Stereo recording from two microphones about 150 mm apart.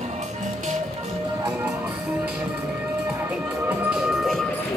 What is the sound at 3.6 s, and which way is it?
Music, 5° right (ahead or behind).